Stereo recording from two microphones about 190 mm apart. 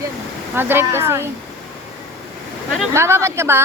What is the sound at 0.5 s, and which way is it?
Speech, 10° right (ahead or behind).